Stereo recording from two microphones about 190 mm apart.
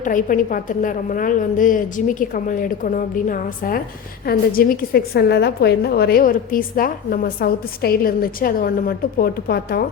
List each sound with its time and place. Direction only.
0.0 s a woman's voice: 45° left (ahead or behind)